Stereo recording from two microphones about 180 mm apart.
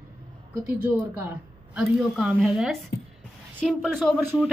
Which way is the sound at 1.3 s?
5° right (ahead or behind).